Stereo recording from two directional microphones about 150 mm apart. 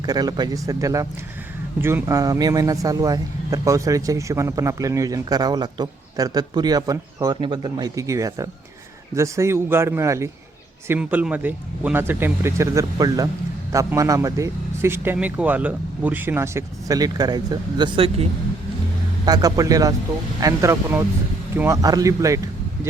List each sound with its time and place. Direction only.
0.0 s speech: 25° right (ahead or behind)
19.2 s speech: 25° right (ahead or behind)